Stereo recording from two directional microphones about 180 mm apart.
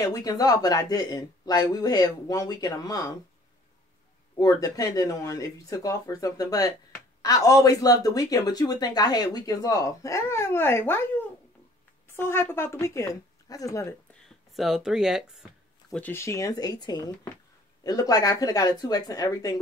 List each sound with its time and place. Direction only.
0.0 s speech: 20° left (ahead or behind)
4.4 s speech: 20° left (ahead or behind)
12.1 s speech: 15° left (ahead or behind)
14.5 s speech: centre (ahead or behind)
16.0 s speech: 15° left (ahead or behind)